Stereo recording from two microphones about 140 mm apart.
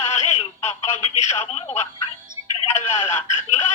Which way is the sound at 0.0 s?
50° left (ahead or behind).